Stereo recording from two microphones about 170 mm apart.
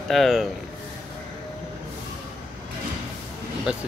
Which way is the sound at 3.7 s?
5° right (ahead or behind).